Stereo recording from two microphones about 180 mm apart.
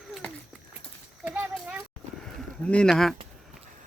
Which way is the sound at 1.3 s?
5° right (ahead or behind).